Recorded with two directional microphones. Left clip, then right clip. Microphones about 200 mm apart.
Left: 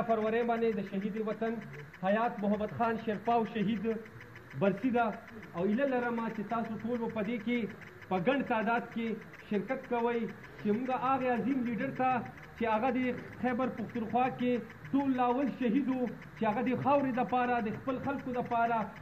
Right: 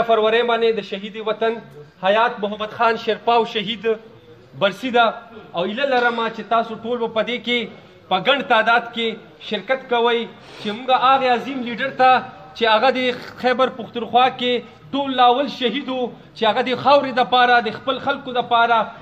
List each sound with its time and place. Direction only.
0.1 s a man's voice: 10° right (ahead or behind)